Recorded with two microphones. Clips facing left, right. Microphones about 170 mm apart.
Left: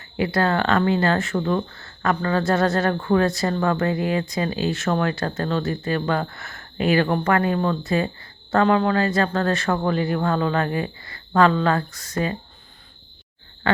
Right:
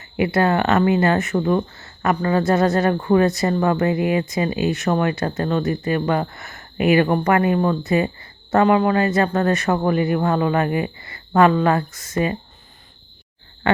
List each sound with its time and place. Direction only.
0.2 s speech: 20° right (ahead or behind)
2.4 s speech: centre (ahead or behind); by 11.9 s 15° right (ahead or behind)
11.9 s speech: centre (ahead or behind)